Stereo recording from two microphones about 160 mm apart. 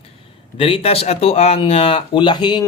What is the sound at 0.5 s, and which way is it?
Speech, 35° left (ahead or behind).